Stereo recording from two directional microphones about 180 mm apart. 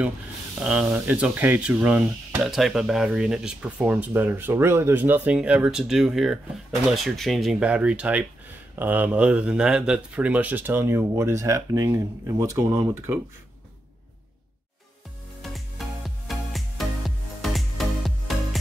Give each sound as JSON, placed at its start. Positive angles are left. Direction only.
{"t": 0.6, "sound": "speech", "side_deg": -5}
{"t": 16.3, "sound": "music", "side_deg": 0}